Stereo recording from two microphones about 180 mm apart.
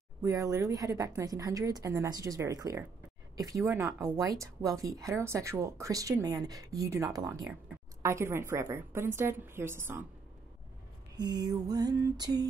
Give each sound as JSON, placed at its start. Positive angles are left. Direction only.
{"t": 0.2, "sound": "a woman's voice", "side_deg": -20}
{"t": 11.1, "sound": "a woman's voice", "side_deg": -20}